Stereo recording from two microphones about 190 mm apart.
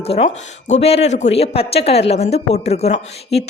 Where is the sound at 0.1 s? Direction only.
35° left (ahead or behind).